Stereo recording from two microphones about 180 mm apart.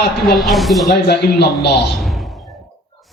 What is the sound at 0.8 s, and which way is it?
Speech, 65° left (ahead or behind).